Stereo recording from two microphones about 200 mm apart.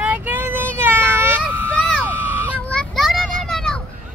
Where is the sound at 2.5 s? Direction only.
5° left (ahead or behind).